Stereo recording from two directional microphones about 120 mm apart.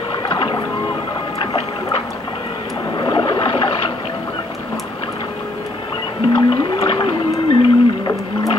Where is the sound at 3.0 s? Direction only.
40° left (ahead or behind).